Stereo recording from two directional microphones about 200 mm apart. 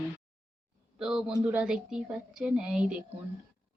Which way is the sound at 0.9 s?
5° right (ahead or behind).